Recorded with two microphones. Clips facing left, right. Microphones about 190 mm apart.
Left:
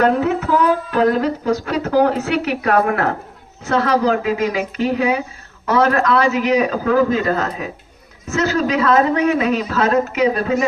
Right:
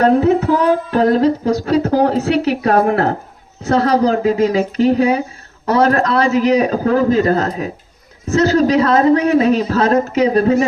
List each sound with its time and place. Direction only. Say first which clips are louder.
0.0 s speech: right 4 dB; 35° right (ahead or behind)